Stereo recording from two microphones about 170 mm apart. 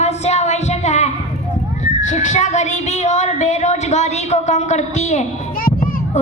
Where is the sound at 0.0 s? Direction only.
40° left (ahead or behind).